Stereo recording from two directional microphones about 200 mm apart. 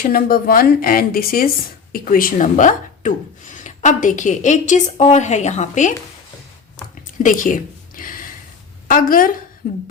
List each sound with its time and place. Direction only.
0.0 s a woman's voice: 50° left (ahead or behind)
7.2 s a sound: 40° left (ahead or behind)
8.9 s a woman's voice: 45° left (ahead or behind)